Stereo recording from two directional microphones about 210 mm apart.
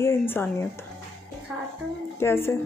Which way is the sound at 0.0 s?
10° left (ahead or behind).